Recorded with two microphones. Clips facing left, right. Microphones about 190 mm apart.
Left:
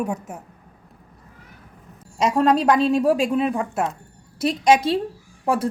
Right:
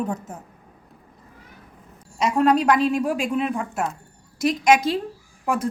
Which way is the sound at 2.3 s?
30° left (ahead or behind).